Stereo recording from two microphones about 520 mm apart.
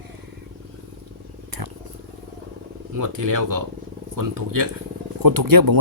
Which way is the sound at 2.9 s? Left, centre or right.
Right.